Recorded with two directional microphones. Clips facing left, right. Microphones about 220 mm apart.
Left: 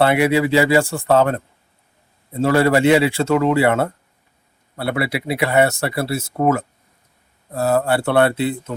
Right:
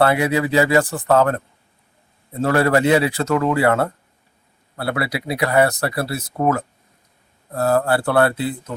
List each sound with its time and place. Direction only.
0.0 s speech: 25° left (ahead or behind)
2.4 s speech: 25° left (ahead or behind)